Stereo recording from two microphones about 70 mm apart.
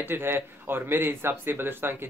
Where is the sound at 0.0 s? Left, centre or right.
Right.